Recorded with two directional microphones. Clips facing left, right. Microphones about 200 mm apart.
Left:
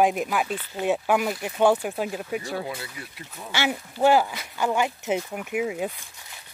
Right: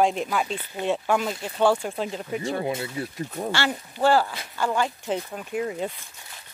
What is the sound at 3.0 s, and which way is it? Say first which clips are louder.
Speech: right 10 dB; 45° right (ahead or behind).